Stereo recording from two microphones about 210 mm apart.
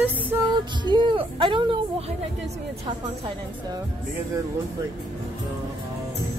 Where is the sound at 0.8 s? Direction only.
20° right (ahead or behind).